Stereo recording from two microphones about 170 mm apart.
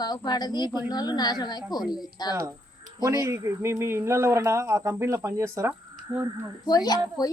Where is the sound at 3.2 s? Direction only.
15° right (ahead or behind).